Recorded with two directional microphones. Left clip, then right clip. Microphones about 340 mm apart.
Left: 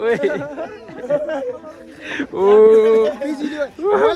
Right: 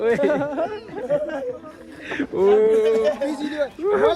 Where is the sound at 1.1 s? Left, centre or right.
Centre.